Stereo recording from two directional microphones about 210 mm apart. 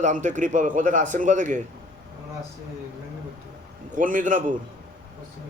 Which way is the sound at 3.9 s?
40° right (ahead or behind).